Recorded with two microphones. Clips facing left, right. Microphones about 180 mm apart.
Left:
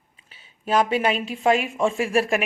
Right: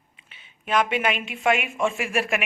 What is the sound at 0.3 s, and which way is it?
A woman's voice, 35° left (ahead or behind).